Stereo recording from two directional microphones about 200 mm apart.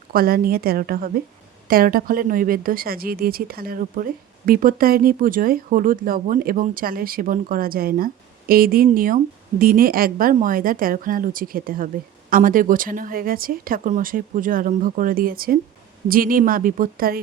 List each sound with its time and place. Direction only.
0.1 s speech: 45° right (ahead or behind)